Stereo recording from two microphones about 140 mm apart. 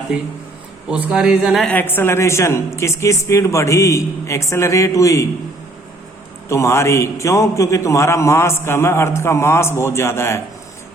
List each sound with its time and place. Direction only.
0.9 s a man's voice: 5° right (ahead or behind)
1.7 s a man's voice: 15° left (ahead or behind)
6.5 s a man's voice: 20° left (ahead or behind)